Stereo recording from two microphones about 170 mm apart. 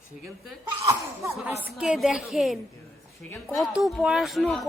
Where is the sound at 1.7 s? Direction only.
Centre (ahead or behind).